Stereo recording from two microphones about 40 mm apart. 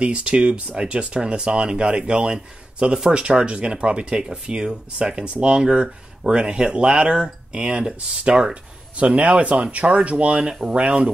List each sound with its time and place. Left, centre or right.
0.0 s a man's voice: right
8.9 s speech: right